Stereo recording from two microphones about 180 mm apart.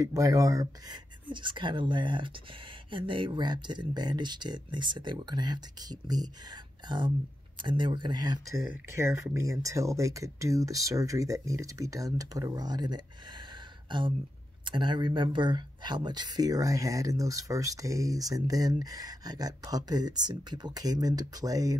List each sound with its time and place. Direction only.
0.0 s speech: 20° right (ahead or behind)